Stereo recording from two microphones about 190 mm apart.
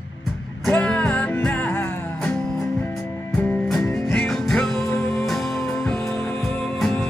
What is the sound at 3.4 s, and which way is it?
Music, 10° left (ahead or behind).